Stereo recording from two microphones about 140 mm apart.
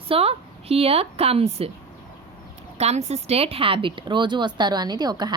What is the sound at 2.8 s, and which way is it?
A woman's voice, 50° right (ahead or behind).